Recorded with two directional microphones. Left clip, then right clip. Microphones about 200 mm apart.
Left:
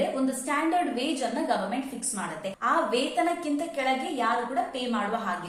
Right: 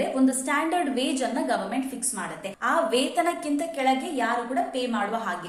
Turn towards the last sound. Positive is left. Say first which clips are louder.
# right 2 dB
turn(degrees=-15)  # may be behind; listen again after turning